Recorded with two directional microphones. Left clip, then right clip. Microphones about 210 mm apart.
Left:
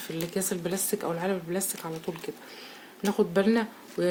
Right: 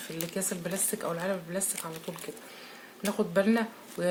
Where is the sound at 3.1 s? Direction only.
45° left (ahead or behind).